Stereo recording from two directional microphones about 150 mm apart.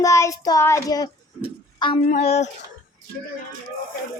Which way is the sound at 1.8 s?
30° left (ahead or behind).